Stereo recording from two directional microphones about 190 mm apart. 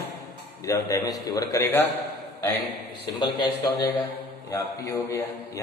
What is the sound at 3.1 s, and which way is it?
A man's voice, 20° left (ahead or behind).